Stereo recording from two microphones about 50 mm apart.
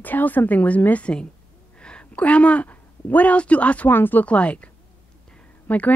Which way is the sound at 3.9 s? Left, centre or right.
Left.